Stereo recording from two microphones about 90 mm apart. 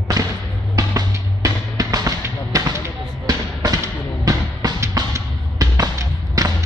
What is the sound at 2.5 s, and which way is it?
Basketball bounce, 45° right (ahead or behind).